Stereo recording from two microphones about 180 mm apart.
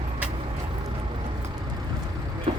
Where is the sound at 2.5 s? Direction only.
30° right (ahead or behind).